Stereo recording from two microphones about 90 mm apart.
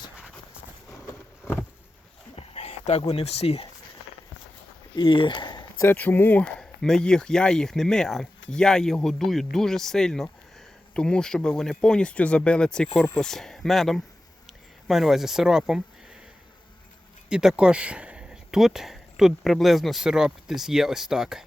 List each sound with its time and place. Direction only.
3.2 s speech: 90° left
4.9 s speech: 70° left (ahead or behind)
6.0 s speech: 25° left (ahead or behind)
6.4 s speech: 5° left (ahead or behind)
17.2 s speech: 10° right (ahead or behind)